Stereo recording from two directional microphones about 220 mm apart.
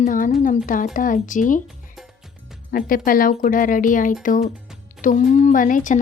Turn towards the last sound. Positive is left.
turn(degrees=35)  # may be behind; listen again after turning